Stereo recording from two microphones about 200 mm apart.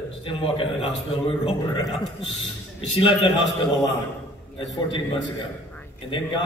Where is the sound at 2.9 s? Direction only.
25° left (ahead or behind).